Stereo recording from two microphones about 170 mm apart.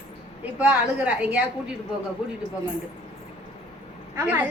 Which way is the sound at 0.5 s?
5° right (ahead or behind).